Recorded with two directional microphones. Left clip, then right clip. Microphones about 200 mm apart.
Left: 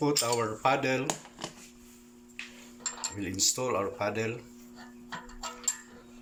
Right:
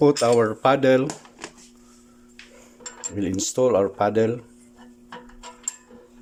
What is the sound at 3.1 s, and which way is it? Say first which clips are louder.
Speech: right 8 dB; 60° right (ahead or behind).